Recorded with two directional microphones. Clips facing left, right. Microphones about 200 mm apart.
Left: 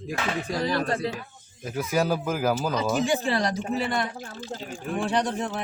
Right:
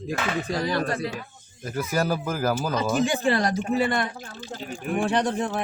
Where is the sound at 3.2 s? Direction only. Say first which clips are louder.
Right 3 dB; 50° right (ahead or behind).